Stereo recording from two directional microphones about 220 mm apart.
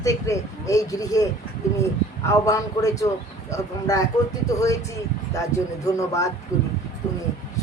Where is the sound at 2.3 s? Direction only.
15° left (ahead or behind).